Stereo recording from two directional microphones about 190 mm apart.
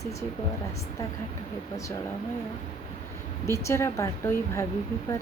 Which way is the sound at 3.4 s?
15° left (ahead or behind).